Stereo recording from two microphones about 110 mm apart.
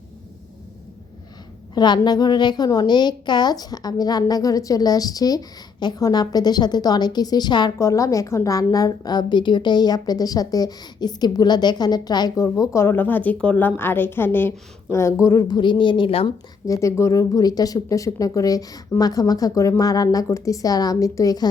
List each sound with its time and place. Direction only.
1.7 s a woman's voice: 40° left (ahead or behind)
7.8 s a woman's voice: 30° left (ahead or behind)
15.4 s speech: 45° left (ahead or behind)
16.6 s a woman's voice: 30° left (ahead or behind)